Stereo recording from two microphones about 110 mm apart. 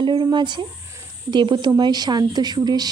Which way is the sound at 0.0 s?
45° right (ahead or behind).